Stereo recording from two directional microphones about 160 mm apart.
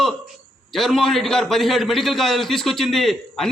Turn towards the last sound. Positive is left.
turn(degrees=0)  # may be behind; listen again after turning